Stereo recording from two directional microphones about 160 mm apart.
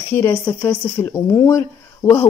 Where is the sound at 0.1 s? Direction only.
20° left (ahead or behind).